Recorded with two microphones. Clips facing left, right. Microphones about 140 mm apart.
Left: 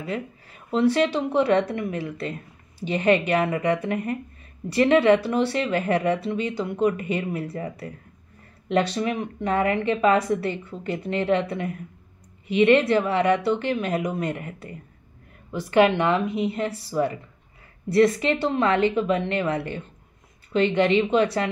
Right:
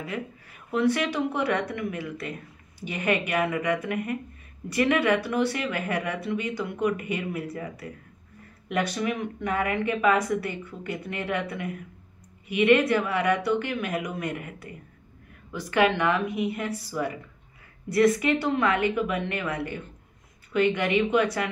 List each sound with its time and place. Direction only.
0.1 s speech: 25° left (ahead or behind)
8.9 s speech: 30° left (ahead or behind)